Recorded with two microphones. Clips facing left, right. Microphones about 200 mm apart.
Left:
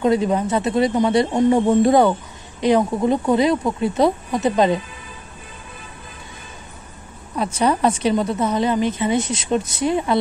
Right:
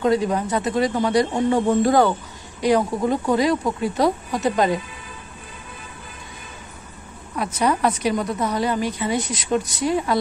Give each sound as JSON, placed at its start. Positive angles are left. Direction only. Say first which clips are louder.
{"t": 0.0, "sound": "a woman's voice", "louder": "left 2 dB", "side_deg": 20}
{"t": 7.5, "sound": "a woman's voice", "louder": "left 2 dB", "side_deg": 30}